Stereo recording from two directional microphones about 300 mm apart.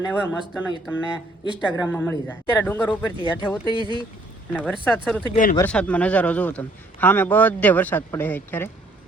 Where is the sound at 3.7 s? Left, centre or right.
Centre.